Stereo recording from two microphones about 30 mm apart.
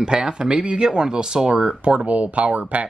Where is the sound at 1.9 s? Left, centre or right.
Right.